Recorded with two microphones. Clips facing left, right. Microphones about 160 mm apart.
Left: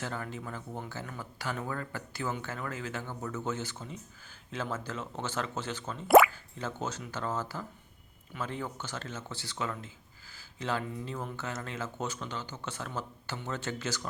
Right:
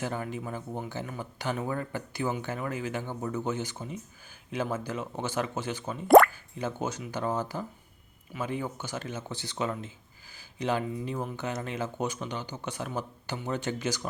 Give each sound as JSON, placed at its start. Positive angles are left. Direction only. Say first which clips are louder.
{"t": 0.0, "sound": "speech", "louder": "right 4 dB", "side_deg": -15}
{"t": 6.1, "sound": "plop", "louder": "right 3 dB", "side_deg": 5}
{"t": 6.3, "sound": "speech", "louder": "right 4 dB", "side_deg": -15}